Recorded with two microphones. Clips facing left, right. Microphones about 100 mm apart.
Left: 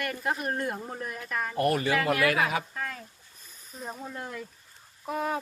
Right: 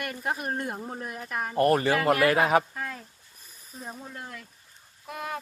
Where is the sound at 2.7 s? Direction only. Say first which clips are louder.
Even; 10° right (ahead or behind).